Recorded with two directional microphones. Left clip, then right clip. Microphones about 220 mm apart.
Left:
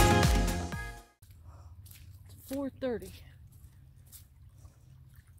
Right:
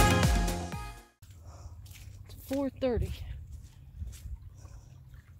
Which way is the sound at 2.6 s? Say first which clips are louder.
Right 4 dB; centre (ahead or behind).